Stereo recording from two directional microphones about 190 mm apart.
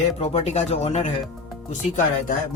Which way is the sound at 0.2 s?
35° left (ahead or behind).